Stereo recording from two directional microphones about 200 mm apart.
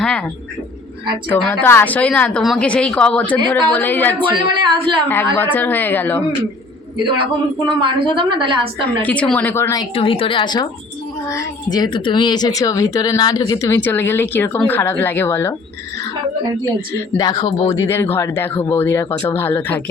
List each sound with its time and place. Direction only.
0.0 s a sound: 5° left (ahead or behind)
1.3 s speech: 5° left (ahead or behind)
4.2 s a woman's voice: 25° right (ahead or behind)
5.4 s speech: 10° left (ahead or behind)
6.9 s a woman's voice: 25° right (ahead or behind)
9.0 s speech: 5° left (ahead or behind)
9.9 s a woman's voice: 25° left (ahead or behind); by 15.5 s 10° left (ahead or behind)
16.9 s speech: 20° left (ahead or behind)